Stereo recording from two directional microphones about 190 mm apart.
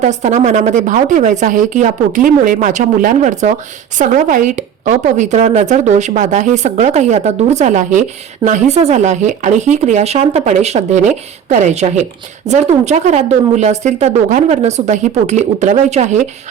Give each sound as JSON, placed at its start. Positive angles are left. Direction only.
{"t": 0.0, "sound": "speech", "side_deg": -40}